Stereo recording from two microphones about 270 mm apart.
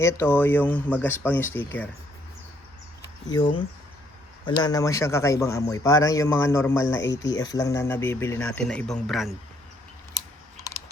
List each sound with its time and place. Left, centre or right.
0.0 s a man's voice: centre
3.0 s a sound: centre
4.4 s a man's voice: centre
7.1 s speech: left
7.3 s a man's voice: centre